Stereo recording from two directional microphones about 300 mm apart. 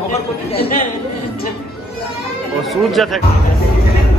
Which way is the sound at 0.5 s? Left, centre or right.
Left.